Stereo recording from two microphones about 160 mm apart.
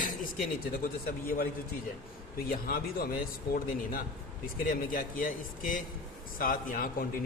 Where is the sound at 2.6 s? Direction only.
65° left (ahead or behind).